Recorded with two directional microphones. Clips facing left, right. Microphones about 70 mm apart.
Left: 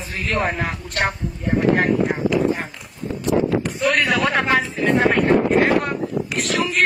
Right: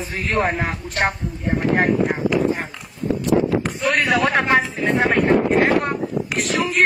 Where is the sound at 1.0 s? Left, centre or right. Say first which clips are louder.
Right 1 dB; right.